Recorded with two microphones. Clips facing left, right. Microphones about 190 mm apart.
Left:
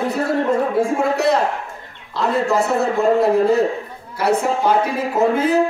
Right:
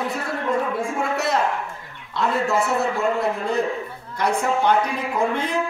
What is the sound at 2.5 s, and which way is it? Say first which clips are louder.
Speech: left 4 dB; 35° left (ahead or behind).